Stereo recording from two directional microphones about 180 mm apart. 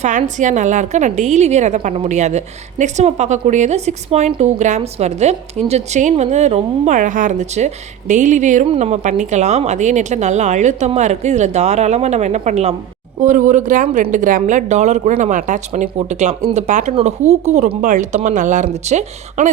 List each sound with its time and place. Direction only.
0.0 s a woman's voice: 45° right (ahead or behind)